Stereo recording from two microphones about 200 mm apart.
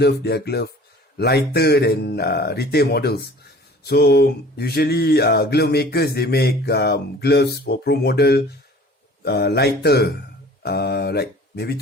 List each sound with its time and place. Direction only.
0.0 s speech: 55° left (ahead or behind)
1.2 s a sound: 55° left (ahead or behind)
9.2 s speech: 55° left (ahead or behind)